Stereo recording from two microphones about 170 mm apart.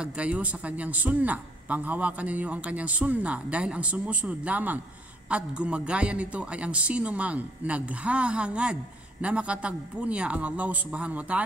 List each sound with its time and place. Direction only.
0.0 s a man's voice: 5° right (ahead or behind)